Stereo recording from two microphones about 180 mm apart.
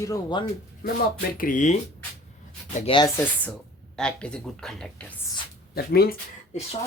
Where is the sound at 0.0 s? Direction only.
20° left (ahead or behind).